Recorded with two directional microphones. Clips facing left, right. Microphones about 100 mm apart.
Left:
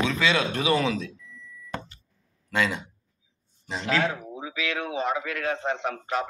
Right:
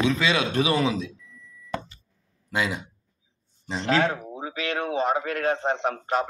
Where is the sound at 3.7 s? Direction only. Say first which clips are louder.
Right 3 dB; 30° right (ahead or behind).